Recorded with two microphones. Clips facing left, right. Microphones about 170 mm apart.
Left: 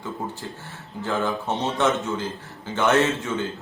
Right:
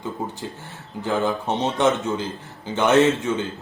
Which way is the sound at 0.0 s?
20° right (ahead or behind).